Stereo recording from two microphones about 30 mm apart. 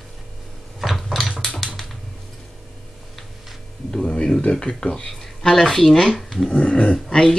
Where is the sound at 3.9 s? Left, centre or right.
Left.